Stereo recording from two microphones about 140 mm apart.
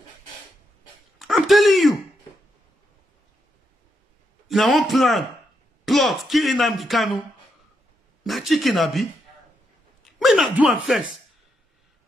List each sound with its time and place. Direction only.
1.2 s a sound: centre (ahead or behind)
4.5 s speech: centre (ahead or behind)
10.1 s speech: centre (ahead or behind)